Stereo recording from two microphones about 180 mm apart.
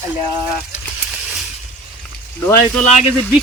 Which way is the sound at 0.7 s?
5° right (ahead or behind).